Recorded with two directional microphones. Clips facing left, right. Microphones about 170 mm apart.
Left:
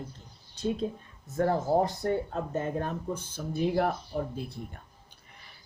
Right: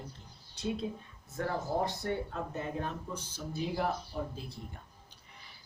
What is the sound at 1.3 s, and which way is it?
Speech, 40° left (ahead or behind).